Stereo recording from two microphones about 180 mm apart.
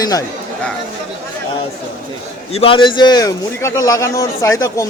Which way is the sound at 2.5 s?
30° left (ahead or behind).